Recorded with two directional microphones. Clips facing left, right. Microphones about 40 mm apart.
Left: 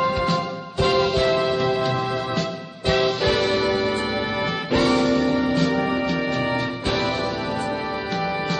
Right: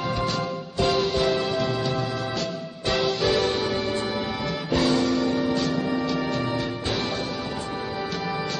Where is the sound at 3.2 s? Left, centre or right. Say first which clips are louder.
Left 2 dB; left.